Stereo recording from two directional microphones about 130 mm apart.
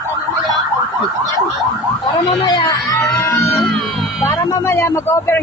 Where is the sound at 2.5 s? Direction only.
30° left (ahead or behind).